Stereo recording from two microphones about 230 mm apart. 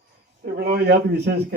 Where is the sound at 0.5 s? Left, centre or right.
Right.